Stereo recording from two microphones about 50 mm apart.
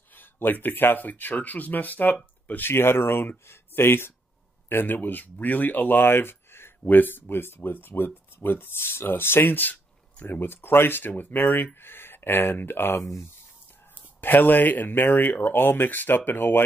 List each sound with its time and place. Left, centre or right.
0.1 s speech: left
2.7 s speech: left
14.2 s speech: left